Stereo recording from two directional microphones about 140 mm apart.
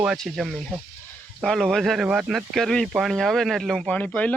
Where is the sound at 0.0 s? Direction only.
5° right (ahead or behind).